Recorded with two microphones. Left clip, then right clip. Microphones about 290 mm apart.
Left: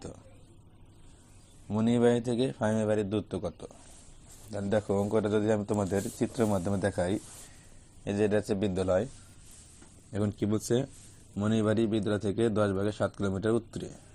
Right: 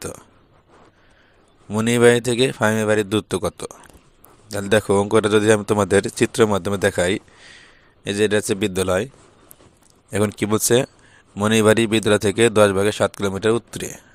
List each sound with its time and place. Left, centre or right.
1.7 s speech: right
8.7 s speech: right
10.1 s speech: right